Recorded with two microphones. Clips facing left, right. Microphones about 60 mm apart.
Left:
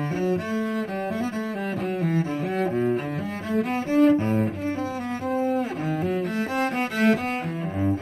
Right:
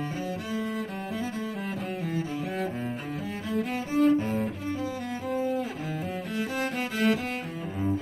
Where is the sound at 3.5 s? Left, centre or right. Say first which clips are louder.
Left 6 dB; left.